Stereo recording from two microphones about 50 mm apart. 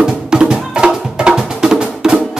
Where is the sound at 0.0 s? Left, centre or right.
Centre.